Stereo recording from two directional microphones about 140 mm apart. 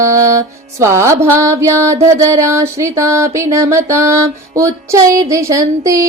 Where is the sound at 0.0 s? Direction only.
20° right (ahead or behind).